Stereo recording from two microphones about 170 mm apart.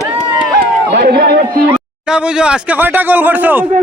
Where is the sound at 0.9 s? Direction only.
75° right (ahead or behind).